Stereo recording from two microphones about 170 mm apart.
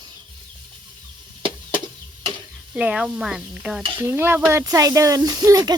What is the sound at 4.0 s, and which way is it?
Speech, 15° right (ahead or behind).